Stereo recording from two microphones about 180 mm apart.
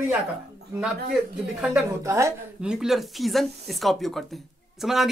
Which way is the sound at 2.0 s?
15° right (ahead or behind).